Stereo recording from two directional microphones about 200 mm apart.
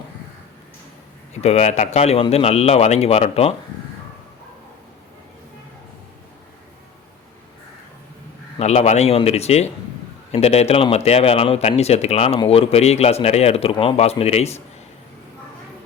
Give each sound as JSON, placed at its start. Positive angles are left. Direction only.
{"t": 1.3, "sound": "speech", "side_deg": 35}
{"t": 8.5, "sound": "speech", "side_deg": 35}